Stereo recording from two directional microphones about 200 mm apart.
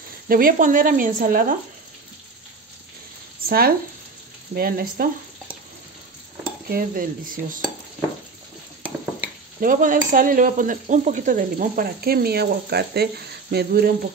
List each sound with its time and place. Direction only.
0.3 s speech: 45° right (ahead or behind)
3.4 s speech: 45° right (ahead or behind)
6.7 s speech: 45° right (ahead or behind)
9.6 s speech: 40° right (ahead or behind)